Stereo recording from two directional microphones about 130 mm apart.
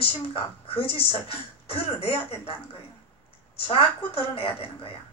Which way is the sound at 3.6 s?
45° left (ahead or behind).